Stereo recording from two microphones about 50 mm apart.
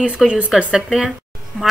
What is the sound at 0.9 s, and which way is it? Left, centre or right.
Speech, centre.